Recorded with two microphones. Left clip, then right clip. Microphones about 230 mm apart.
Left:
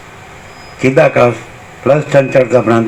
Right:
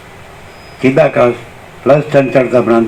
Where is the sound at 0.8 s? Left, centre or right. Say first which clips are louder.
Left 1 dB; left.